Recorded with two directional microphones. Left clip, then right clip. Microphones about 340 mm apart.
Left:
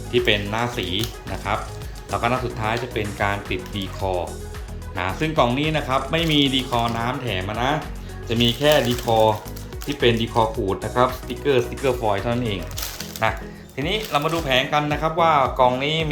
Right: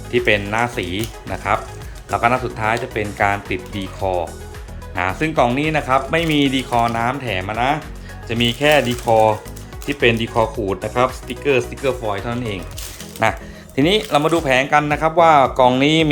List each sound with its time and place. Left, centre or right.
0.1 s speech: centre
13.2 s speech: centre
15.8 s speech: right